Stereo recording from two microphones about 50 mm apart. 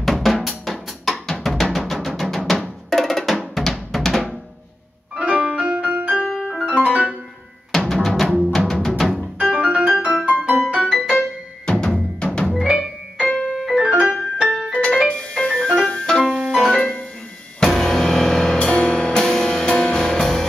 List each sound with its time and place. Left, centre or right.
0.0 s drum: centre
5.2 s piano: right
6.1 s piano: centre
6.6 s piano: right
7.9 s drum: centre
8.5 s music: centre
9.4 s piano: right
10.0 s music: centre
11.6 s music: centre
12.4 s music: centre
13.5 s keyboard: centre
13.8 s keyboard: centre
15.0 s music: centre
18.6 s music: centre